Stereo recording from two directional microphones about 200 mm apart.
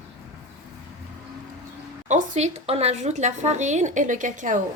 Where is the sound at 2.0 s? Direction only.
35° right (ahead or behind).